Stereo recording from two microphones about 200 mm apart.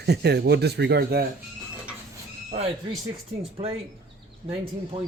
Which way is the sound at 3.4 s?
30° right (ahead or behind).